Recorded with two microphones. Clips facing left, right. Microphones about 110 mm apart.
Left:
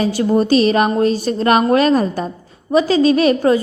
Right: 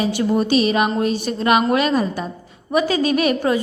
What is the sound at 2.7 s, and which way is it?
Speech, 30° left (ahead or behind).